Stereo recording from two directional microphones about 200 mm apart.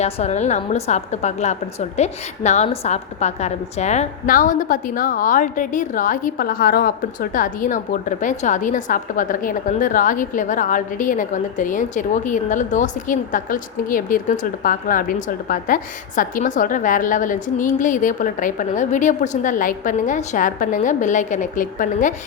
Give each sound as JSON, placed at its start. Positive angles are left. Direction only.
{"t": 0.0, "sound": "a woman's voice", "side_deg": 35}